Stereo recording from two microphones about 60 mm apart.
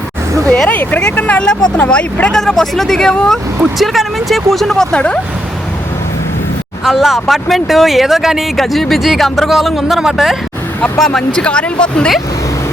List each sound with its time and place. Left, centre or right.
0.4 s speech: centre
0.7 s speech: left
2.4 s speech: centre
3.8 s speech: centre
6.8 s speech: centre
11.0 s speech: centre